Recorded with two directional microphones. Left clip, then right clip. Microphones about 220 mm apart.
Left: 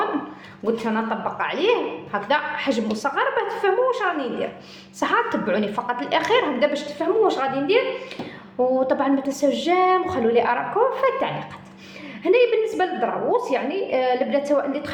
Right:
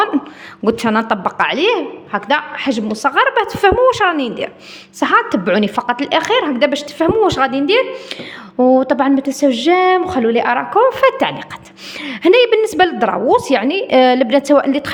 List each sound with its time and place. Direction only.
0.1 s a sound: 45° right (ahead or behind)
0.6 s a woman's voice: 50° right (ahead or behind)
8.7 s a woman's voice: 40° right (ahead or behind)